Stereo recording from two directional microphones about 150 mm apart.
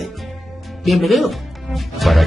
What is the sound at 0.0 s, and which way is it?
Music, centre (ahead or behind).